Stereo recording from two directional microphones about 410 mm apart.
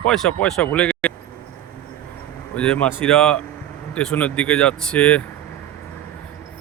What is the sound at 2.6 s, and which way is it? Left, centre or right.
Speech, centre.